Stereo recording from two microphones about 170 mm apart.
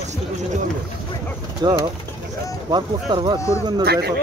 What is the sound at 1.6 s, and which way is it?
Speech, 25° right (ahead or behind).